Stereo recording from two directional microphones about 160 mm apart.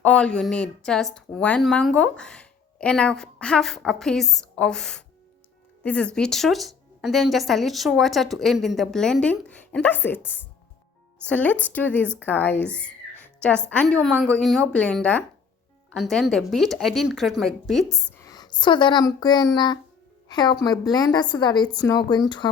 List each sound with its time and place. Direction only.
0.0 s a woman's voice: 5° left (ahead or behind)
13.1 s music: 10° left (ahead or behind)
13.7 s a woman's voice: 10° left (ahead or behind)
18.3 s a woman's voice: 25° left (ahead or behind)